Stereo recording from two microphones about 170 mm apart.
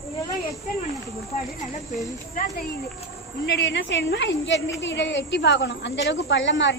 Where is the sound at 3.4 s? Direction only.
90° left.